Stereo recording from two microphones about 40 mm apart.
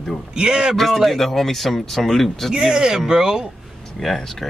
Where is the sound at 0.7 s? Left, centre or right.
Centre.